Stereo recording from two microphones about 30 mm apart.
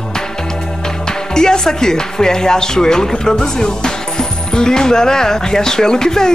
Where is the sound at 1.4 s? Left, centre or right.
Left.